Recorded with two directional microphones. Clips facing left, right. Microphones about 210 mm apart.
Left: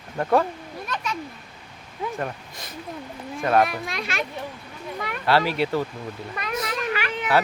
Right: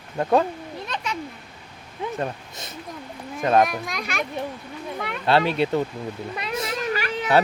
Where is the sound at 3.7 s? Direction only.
Centre (ahead or behind).